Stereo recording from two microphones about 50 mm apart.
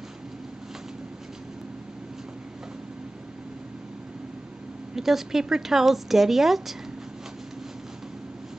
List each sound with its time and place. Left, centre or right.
4.9 s speech: centre